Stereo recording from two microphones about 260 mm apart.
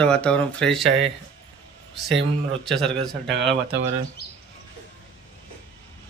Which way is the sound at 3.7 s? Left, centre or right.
Right.